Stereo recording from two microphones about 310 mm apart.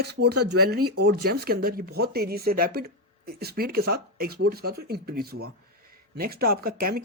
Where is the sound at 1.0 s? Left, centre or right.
Right.